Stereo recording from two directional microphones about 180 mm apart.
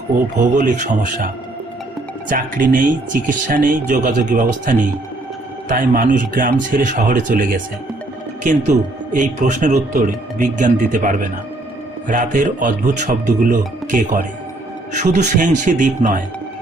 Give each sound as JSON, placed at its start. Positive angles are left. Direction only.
{"t": 0.3, "sound": "speech", "side_deg": -45}
{"t": 2.3, "sound": "speech", "side_deg": -50}
{"t": 9.1, "sound": "speech", "side_deg": -45}